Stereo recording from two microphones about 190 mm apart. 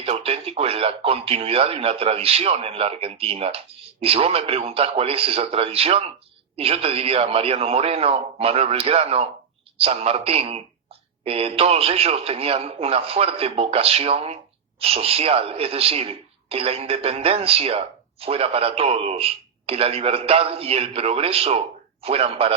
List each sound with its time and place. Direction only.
0.0 s a man's voice: 30° right (ahead or behind)